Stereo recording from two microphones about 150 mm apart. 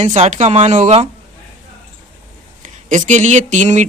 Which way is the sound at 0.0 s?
50° right (ahead or behind).